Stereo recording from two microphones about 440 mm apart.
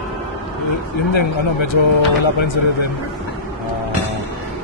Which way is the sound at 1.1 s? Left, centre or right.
Left.